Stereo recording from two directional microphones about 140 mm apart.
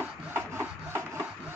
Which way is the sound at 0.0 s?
15° right (ahead or behind).